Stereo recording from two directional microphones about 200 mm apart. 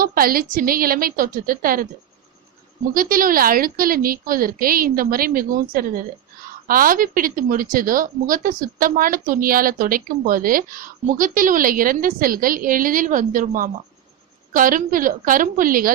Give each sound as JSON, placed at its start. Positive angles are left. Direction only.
{"t": 0.0, "sound": "speech", "side_deg": -45}
{"t": 2.9, "sound": "speech", "side_deg": -45}